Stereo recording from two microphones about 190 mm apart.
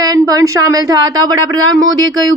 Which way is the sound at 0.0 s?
20° right (ahead or behind).